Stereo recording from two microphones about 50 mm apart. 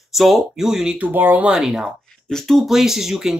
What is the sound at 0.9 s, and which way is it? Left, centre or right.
Speech, right.